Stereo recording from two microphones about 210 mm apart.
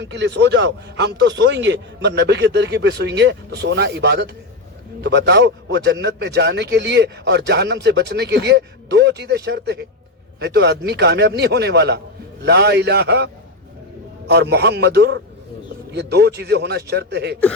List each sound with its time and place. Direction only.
0.0 s a man's voice: 55° right (ahead or behind)